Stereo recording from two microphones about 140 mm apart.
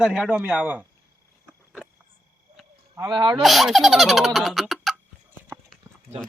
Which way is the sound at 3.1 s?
35° right (ahead or behind).